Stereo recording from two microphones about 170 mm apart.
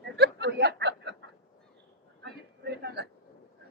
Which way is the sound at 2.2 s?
75° right (ahead or behind).